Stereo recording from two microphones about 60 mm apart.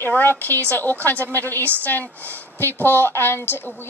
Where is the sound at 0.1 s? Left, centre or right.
Left.